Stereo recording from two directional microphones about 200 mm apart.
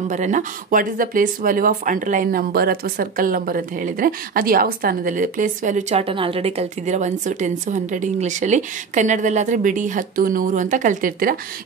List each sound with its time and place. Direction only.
0.1 s speech: 40° right (ahead or behind)